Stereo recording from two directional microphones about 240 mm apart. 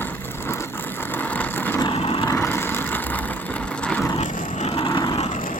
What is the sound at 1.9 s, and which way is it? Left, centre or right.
Vehicle, left.